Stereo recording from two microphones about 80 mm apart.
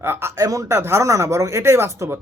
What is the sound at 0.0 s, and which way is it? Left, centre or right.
Speech, right.